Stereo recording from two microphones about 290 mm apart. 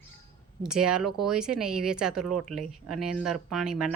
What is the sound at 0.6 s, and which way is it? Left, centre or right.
A woman's voice, centre.